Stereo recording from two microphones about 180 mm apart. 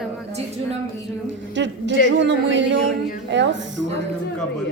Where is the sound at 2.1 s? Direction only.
85° right.